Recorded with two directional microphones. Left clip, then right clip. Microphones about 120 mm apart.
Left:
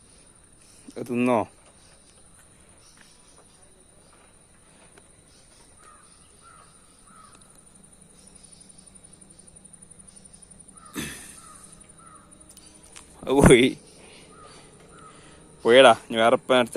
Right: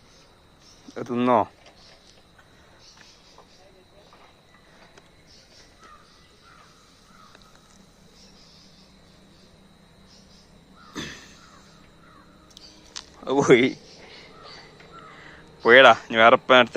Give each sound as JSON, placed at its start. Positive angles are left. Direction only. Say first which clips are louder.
{"t": 0.9, "sound": "speech", "louder": "right 3 dB", "side_deg": 40}
{"t": 10.9, "sound": "crow", "louder": "even", "side_deg": 70}
{"t": 13.2, "sound": "speech", "louder": "left 1 dB", "side_deg": 85}
{"t": 15.6, "sound": "speech", "louder": "right 2 dB", "side_deg": 35}